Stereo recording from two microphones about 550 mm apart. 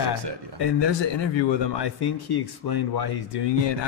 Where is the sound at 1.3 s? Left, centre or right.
Left.